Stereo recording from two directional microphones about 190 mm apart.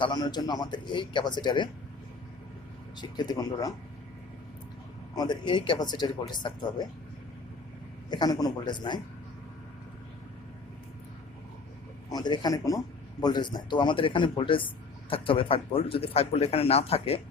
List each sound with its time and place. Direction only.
0.0 s speech: 20° left (ahead or behind)
3.0 s speech: 20° left (ahead or behind)
5.1 s speech: 20° left (ahead or behind)
8.1 s speech: 20° left (ahead or behind)
12.0 s speech: 20° left (ahead or behind)